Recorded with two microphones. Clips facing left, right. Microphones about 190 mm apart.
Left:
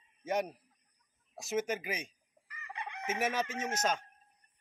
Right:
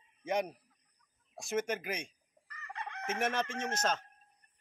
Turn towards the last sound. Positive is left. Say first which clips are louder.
# left 1 dB
turn(degrees=10)  # may be behind; listen again after turning